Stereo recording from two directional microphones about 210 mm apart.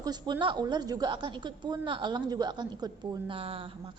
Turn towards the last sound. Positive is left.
turn(degrees=-25)  # may be behind; listen again after turning